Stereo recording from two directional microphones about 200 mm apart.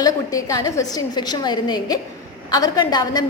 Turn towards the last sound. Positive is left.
turn(degrees=20)  # may be behind; listen again after turning